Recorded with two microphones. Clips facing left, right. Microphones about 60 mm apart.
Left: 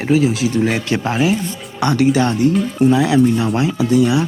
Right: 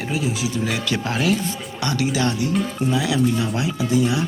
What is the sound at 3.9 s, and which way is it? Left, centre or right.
Speech, left.